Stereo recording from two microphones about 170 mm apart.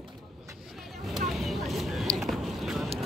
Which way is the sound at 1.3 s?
Centre (ahead or behind).